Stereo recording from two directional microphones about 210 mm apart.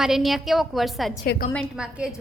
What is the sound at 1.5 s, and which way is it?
Speech, centre (ahead or behind).